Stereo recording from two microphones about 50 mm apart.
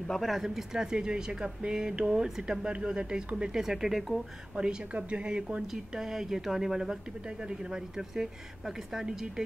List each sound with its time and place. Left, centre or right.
0.1 s speech: centre
4.6 s speech: right
5.7 s speech: centre